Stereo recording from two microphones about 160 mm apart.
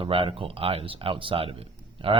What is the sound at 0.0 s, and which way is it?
Speech, 35° right (ahead or behind).